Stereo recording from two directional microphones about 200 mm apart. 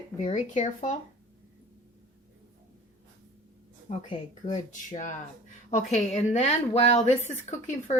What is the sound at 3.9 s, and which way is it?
A woman's voice, 35° left (ahead or behind).